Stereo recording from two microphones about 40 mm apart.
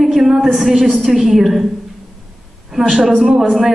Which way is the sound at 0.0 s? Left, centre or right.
Centre.